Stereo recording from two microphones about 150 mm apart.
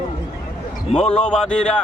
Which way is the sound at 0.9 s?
5° left (ahead or behind).